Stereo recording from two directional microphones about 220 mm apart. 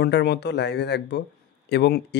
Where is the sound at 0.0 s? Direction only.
50° left (ahead or behind).